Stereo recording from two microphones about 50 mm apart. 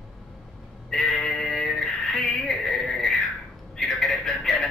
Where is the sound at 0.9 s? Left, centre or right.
Centre.